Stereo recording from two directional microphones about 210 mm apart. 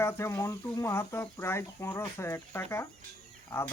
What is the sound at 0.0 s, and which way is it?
Speech, 10° left (ahead or behind).